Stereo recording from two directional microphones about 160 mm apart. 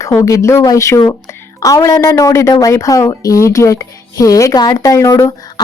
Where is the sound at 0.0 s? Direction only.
20° left (ahead or behind).